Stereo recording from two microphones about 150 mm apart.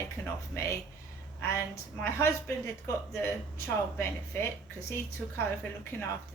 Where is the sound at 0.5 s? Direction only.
20° left (ahead or behind).